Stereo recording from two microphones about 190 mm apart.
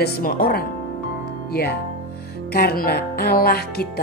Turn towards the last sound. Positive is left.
turn(degrees=55)  # may be behind; listen again after turning